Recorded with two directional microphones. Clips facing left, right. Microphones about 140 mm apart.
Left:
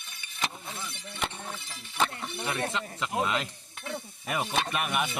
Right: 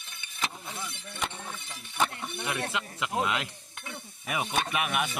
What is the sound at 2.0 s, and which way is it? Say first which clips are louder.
Speech: even; centre (ahead or behind).